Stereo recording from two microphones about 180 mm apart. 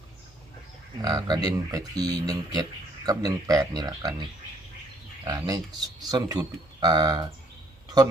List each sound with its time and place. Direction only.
1.0 s speech: 20° right (ahead or behind)